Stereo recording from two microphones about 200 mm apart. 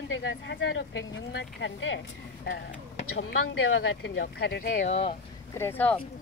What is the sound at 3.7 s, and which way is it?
Speech, 75° left (ahead or behind).